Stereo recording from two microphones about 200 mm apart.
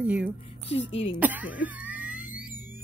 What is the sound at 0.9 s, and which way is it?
Speech, 30° left (ahead or behind).